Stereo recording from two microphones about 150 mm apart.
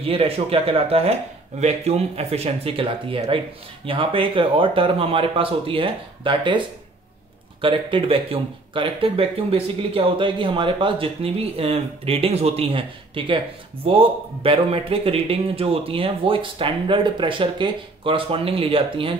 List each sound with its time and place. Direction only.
0.0 s speech: 40° right (ahead or behind)
7.6 s speech: 35° right (ahead or behind)